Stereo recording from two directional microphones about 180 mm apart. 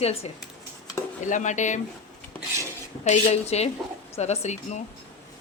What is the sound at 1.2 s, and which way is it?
Speech, 45° left (ahead or behind).